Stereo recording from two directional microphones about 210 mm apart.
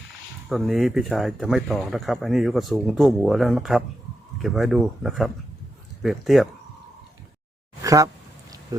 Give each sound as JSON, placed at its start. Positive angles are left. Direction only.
{"t": 0.4, "sound": "speech", "side_deg": 0}
{"t": 7.8, "sound": "a sound", "side_deg": -15}
{"t": 8.7, "sound": "speech", "side_deg": -15}